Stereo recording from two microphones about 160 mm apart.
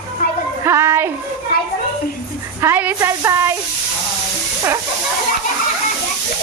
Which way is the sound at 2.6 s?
10° right (ahead or behind).